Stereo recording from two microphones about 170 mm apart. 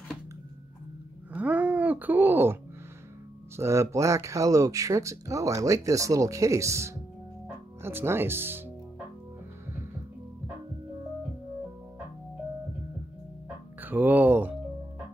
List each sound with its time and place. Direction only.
1.3 s groan: 10° right (ahead or behind)
3.5 s speech: 15° right (ahead or behind)
13.7 s speech: 10° right (ahead or behind)